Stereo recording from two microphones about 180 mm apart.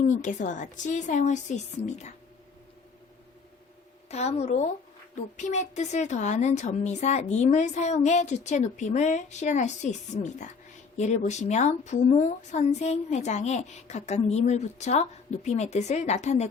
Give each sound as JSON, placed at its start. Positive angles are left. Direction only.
{"t": 0.0, "sound": "a woman's voice", "side_deg": 45}
{"t": 4.1, "sound": "a woman's voice", "side_deg": 35}